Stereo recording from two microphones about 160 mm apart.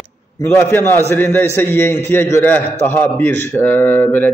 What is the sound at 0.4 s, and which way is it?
A man's voice, 15° left (ahead or behind).